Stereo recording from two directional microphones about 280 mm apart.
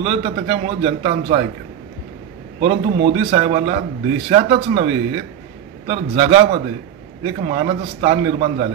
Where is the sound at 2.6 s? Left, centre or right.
Centre.